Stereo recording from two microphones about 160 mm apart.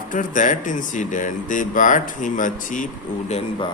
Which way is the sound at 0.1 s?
55° left (ahead or behind).